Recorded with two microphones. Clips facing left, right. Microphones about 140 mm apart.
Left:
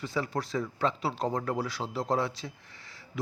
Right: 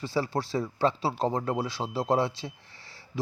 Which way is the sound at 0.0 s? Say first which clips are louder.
Right 3 dB; 30° right (ahead or behind).